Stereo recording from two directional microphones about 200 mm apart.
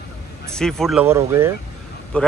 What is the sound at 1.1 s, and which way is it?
Speech, 10° right (ahead or behind).